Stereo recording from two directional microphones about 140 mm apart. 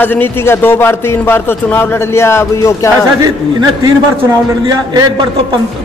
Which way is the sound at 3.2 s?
30° right (ahead or behind).